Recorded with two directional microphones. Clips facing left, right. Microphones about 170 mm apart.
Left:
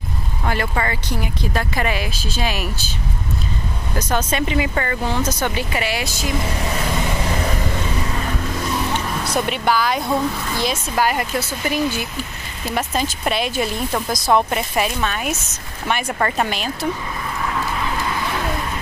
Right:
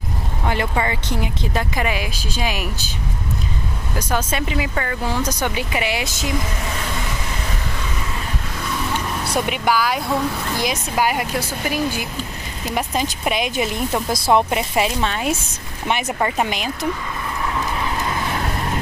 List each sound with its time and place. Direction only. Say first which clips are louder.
0.5 s speech: right 1 dB; 15° right (ahead or behind)
3.9 s speech: left 1 dB; 10° right (ahead or behind)
9.3 s speech: even; 10° right (ahead or behind)
16.1 s speech: even; 10° right (ahead or behind)